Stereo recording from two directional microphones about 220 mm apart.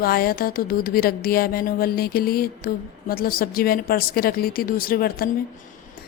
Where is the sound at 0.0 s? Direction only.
45° left (ahead or behind).